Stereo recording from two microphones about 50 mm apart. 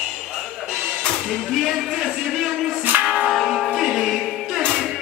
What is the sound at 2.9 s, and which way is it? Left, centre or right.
Music, right.